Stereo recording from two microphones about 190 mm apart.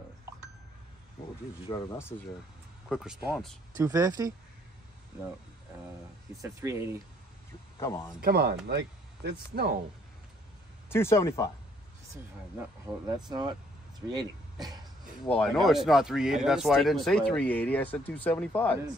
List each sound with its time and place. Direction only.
1.7 s speech: 15° left (ahead or behind)
2.9 s speech: 5° right (ahead or behind)
3.7 s speech: 20° right (ahead or behind)
6.4 s speech: 15° right (ahead or behind)
7.8 s speech: 15° left (ahead or behind)
8.2 s speech: 55° right (ahead or behind)
10.9 s speech: 15° left (ahead or behind)
12.8 s speech: 20° right (ahead or behind)
15.2 s speech: 5° left (ahead or behind)